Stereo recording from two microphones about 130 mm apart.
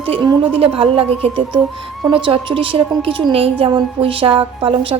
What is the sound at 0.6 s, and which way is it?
A woman's voice, 45° right (ahead or behind).